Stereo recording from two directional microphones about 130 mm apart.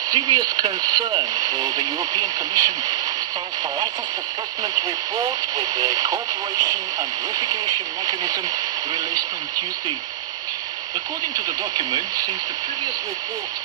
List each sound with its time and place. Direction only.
0.1 s speech: 30° right (ahead or behind)
4.7 s speech: 30° right (ahead or behind)
11.3 s speech: 30° right (ahead or behind)